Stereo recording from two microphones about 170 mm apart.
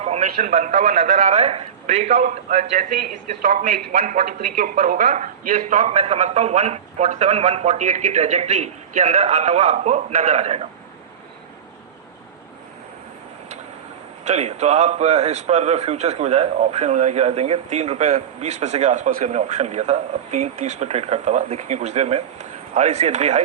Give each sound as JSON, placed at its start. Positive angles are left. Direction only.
{"t": 0.0, "sound": "a man's voice", "side_deg": -40}
{"t": 14.3, "sound": "a man's voice", "side_deg": -40}